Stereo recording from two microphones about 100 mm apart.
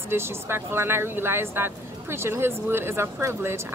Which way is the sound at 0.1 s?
25° right (ahead or behind).